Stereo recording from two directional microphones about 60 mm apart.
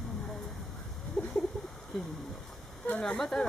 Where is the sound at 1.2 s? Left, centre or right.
Centre.